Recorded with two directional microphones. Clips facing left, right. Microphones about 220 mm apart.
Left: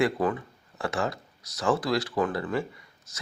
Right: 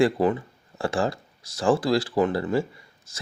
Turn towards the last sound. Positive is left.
turn(degrees=-30)  # may be behind; listen again after turning